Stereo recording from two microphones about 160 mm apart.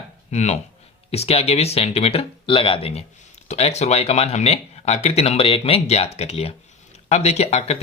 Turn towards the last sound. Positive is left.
turn(degrees=40)  # may be behind; listen again after turning